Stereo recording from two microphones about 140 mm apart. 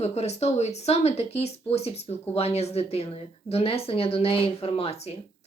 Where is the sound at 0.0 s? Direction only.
50° left (ahead or behind).